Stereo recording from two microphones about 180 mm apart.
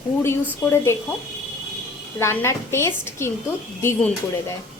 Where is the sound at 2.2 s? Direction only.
15° left (ahead or behind).